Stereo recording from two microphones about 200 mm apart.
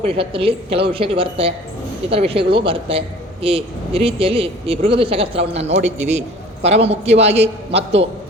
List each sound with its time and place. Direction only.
0.0 s a woman's voice: 25° right (ahead or behind)